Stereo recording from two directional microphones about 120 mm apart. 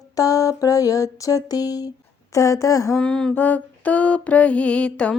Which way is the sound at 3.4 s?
15° left (ahead or behind).